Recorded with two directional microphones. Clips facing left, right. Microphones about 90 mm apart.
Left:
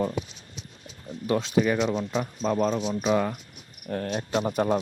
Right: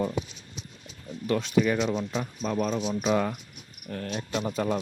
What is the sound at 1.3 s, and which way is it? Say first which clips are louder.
Speech: left 1 dB; 30° left (ahead or behind).